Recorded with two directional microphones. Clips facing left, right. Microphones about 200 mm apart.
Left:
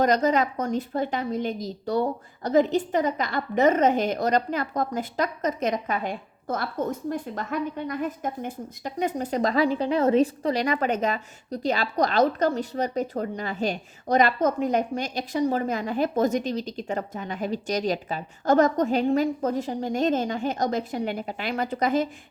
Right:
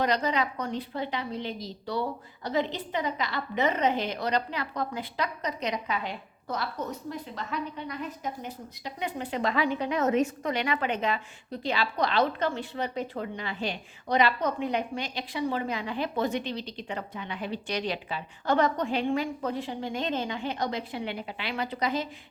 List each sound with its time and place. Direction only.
0.0 s a woman's voice: 45° left (ahead or behind)